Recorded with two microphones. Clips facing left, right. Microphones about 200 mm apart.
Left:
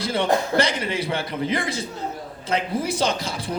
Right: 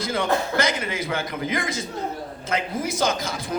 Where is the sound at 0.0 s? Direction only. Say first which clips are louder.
Left 2 dB; 30° left (ahead or behind).